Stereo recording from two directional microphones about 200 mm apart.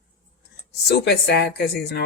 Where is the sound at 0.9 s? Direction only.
55° left (ahead or behind).